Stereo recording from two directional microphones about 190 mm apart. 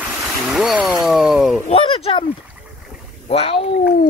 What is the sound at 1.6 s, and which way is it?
Speech, 30° left (ahead or behind).